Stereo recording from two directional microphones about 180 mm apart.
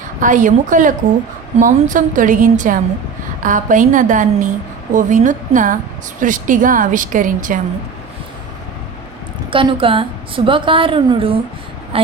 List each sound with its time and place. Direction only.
0.2 s speech: 45° right (ahead or behind)
9.5 s a woman's voice: 30° right (ahead or behind)